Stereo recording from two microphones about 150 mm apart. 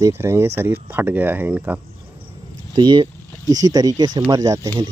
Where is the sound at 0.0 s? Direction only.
15° right (ahead or behind).